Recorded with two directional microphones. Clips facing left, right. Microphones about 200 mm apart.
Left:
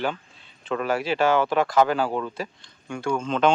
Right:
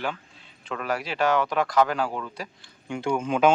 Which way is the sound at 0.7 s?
30° left (ahead or behind).